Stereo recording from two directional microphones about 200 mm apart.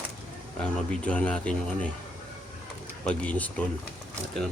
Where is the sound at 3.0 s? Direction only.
5° left (ahead or behind).